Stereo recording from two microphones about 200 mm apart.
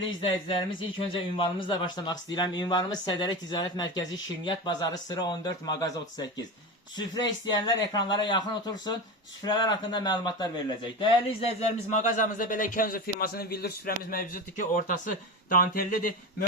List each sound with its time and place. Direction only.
0.0 s speech: 25° left (ahead or behind)
11.3 s speech: 35° left (ahead or behind)